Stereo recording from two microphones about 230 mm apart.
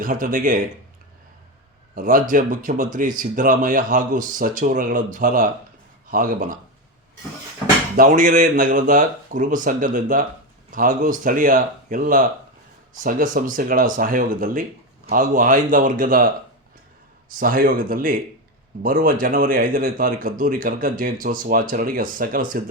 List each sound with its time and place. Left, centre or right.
0.0 s speech: right
2.0 s speech: right
7.9 s speech: right
17.2 s speech: right